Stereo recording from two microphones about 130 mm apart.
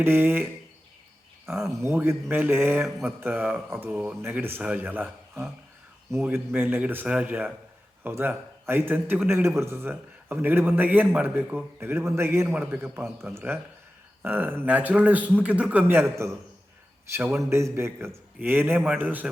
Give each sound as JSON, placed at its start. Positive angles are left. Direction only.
{"t": 0.0, "sound": "a man's voice", "side_deg": -15}
{"t": 1.5, "sound": "a man's voice", "side_deg": -20}
{"t": 13.0, "sound": "a man's voice", "side_deg": 0}
{"t": 13.3, "sound": "a man's voice", "side_deg": -15}